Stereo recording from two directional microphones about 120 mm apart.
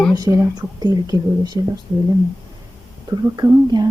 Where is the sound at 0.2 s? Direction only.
30° right (ahead or behind).